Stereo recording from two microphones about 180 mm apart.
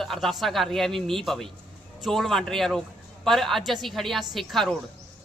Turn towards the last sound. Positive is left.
turn(degrees=0)  # may be behind; listen again after turning